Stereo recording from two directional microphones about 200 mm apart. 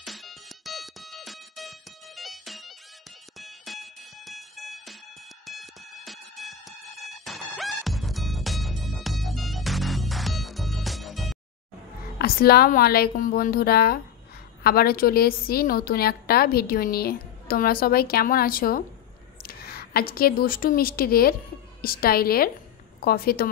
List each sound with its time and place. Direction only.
0.0 s music: centre (ahead or behind)
12.2 s a woman's voice: 50° left (ahead or behind)